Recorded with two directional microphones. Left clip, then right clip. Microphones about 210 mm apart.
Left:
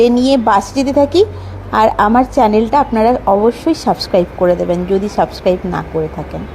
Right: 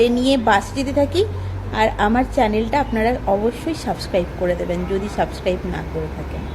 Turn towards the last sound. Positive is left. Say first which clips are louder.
# left 8 dB
turn(degrees=30)  # may be behind; listen again after turning